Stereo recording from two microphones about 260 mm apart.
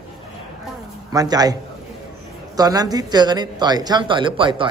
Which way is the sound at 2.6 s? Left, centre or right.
Centre.